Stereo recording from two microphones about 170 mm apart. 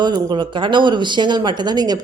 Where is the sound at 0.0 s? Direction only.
25° right (ahead or behind).